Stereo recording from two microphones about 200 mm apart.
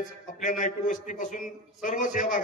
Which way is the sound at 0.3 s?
40° left (ahead or behind).